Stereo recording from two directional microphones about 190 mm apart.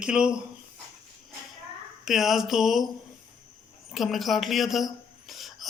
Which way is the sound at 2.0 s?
Centre (ahead or behind).